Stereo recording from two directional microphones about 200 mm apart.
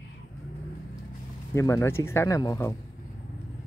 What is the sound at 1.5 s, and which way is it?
Speech, 15° left (ahead or behind).